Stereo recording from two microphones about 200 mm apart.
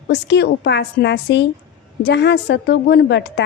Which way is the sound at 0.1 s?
55° left (ahead or behind).